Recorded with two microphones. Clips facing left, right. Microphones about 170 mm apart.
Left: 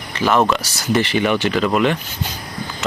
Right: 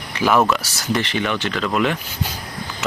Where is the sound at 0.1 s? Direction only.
10° right (ahead or behind).